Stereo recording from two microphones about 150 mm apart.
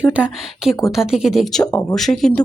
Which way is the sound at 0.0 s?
10° right (ahead or behind).